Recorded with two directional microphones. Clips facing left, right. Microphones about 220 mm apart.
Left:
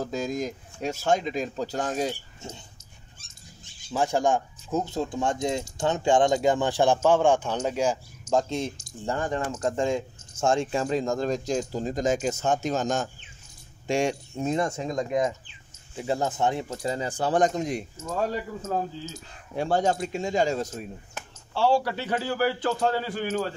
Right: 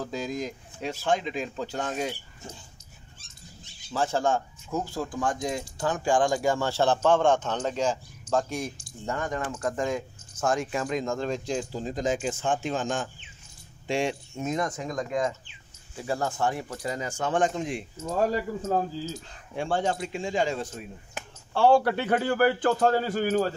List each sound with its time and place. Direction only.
0.0 s speech: 45° left (ahead or behind)
2.4 s speech: 25° left (ahead or behind)
3.9 s speech: 15° left (ahead or behind)
8.7 s speech: 35° left (ahead or behind)
19.5 s speech: 40° left (ahead or behind)
21.5 s a man's voice: 55° right (ahead or behind)